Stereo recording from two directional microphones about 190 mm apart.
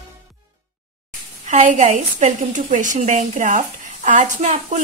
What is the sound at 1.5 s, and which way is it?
A woman's voice, 40° right (ahead or behind).